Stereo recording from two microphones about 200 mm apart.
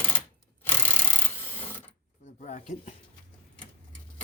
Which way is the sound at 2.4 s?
40° left (ahead or behind).